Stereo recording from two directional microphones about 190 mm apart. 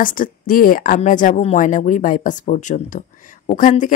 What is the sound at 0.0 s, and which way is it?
A woman's voice, 45° left (ahead or behind).